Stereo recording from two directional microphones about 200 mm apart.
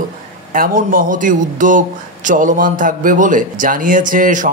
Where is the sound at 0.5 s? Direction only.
45° right (ahead or behind).